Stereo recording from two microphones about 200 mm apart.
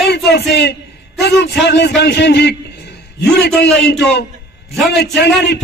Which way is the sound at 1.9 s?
60° left (ahead or behind).